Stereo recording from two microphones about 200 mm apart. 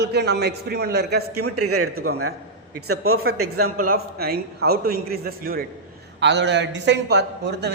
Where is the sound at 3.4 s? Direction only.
90° right.